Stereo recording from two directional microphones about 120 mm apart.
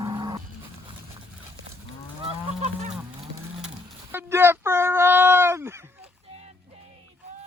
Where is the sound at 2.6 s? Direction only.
60° right (ahead or behind).